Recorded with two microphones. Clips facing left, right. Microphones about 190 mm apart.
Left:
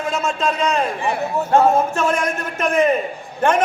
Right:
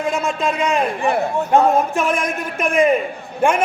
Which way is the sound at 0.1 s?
15° right (ahead or behind).